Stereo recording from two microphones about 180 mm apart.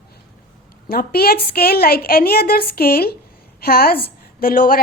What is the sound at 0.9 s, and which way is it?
A woman's voice, 60° left (ahead or behind).